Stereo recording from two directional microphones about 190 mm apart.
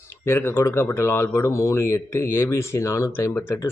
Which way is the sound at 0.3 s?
10° left (ahead or behind).